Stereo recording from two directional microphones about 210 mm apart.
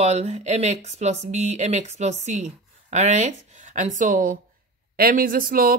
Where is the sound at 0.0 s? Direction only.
30° right (ahead or behind).